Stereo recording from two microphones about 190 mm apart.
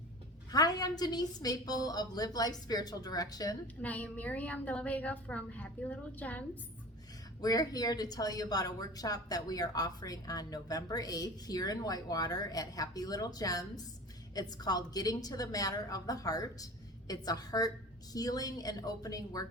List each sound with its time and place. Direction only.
0.5 s a woman's voice: 20° left (ahead or behind)
3.8 s a woman's voice: 10° left (ahead or behind)
7.4 s a woman's voice: 20° left (ahead or behind)